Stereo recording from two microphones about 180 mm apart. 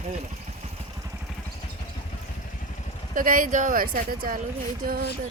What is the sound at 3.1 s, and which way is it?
Speech, 50° right (ahead or behind).